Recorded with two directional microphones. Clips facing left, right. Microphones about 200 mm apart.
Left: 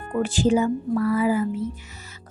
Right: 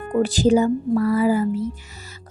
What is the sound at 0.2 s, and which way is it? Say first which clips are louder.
A woman's voice: right 3 dB; 40° right (ahead or behind).